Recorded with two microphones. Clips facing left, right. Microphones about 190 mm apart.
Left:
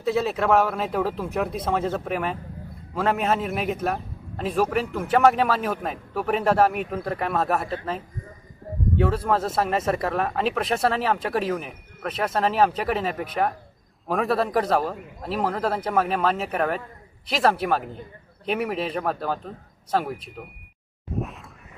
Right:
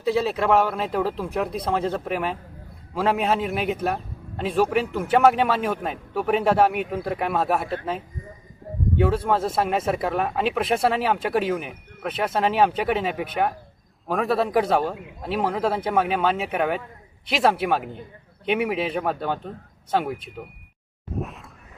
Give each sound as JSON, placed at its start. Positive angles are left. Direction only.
{"t": 0.0, "sound": "a man's voice", "side_deg": 0}